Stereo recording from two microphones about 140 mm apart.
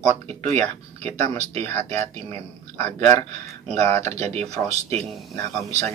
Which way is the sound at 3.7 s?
50° right (ahead or behind).